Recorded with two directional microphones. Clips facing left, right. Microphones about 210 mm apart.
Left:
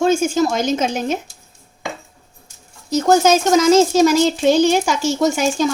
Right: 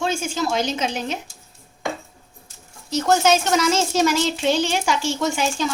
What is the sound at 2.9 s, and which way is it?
A child's voice, 40° left (ahead or behind).